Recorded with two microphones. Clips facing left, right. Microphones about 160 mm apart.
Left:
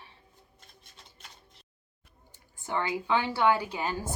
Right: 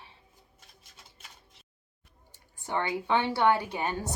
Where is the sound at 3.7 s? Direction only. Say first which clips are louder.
Right 1 dB; 20° right (ahead or behind).